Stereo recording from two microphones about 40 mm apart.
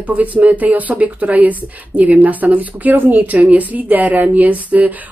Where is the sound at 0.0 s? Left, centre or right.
Right.